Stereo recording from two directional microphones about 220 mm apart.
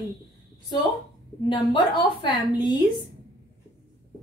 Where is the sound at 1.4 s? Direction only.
20° left (ahead or behind).